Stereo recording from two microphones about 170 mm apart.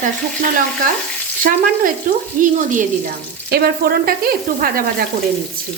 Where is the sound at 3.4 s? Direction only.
65° right (ahead or behind).